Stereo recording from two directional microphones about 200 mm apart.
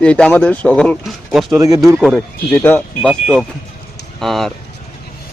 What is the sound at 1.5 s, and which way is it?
Speech, 15° right (ahead or behind).